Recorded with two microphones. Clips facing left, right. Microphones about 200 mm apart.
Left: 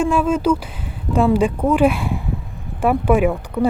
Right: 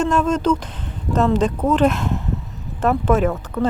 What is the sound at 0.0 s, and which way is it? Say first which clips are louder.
Speech: left 1 dB; 10° left (ahead or behind).